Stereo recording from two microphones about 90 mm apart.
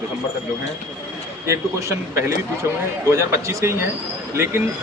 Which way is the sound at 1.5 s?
35° right (ahead or behind).